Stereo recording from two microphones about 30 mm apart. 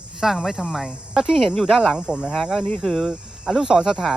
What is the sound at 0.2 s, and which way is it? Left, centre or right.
Speech, centre.